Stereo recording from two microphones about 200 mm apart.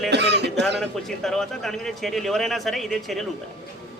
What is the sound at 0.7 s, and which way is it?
Speech, centre (ahead or behind).